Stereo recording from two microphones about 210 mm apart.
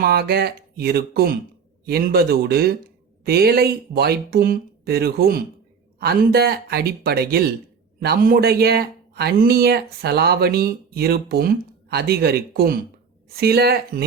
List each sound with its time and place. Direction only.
0.0 s a man's voice: 50° right (ahead or behind)